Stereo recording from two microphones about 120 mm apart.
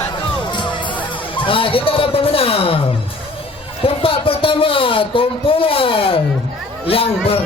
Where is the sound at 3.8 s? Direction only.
50° left (ahead or behind).